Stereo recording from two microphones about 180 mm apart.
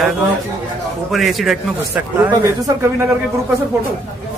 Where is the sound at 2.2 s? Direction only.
20° right (ahead or behind).